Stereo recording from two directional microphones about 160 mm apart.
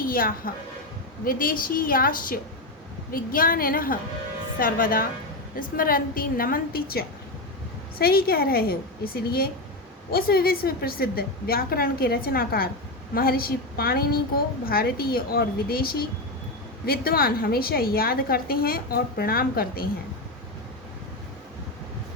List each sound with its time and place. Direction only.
0.0 s a woman's voice: 65° left (ahead or behind)